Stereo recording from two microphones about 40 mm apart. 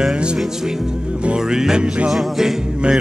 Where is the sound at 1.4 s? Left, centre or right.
Centre.